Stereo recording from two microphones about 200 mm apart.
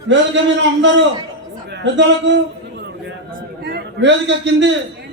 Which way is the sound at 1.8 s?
60° right (ahead or behind).